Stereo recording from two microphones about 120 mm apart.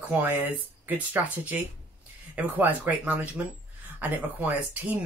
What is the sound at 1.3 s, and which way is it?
Speech, 15° right (ahead or behind).